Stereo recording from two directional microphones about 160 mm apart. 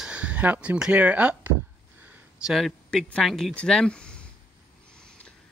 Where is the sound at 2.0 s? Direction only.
10° right (ahead or behind).